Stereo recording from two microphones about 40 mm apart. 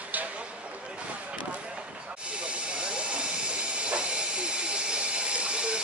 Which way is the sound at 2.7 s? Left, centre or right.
Right.